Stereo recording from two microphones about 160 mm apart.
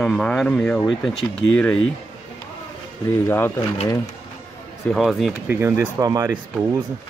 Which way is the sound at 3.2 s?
15° left (ahead or behind).